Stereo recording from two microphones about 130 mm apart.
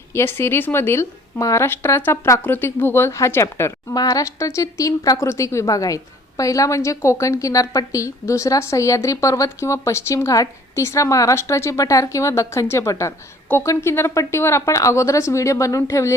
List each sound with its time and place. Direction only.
0.1 s a woman's voice: 20° left (ahead or behind)